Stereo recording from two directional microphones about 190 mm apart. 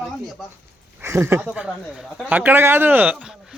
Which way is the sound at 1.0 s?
15° right (ahead or behind).